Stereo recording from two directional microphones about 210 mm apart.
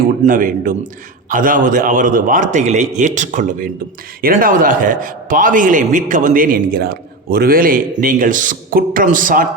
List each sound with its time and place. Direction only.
0.3 s a man's voice: 40° right (ahead or behind)